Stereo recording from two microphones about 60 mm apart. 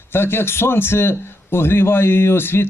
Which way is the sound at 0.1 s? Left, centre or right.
Left.